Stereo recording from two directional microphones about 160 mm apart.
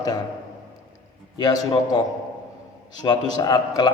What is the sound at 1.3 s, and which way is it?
Speech, 25° left (ahead or behind).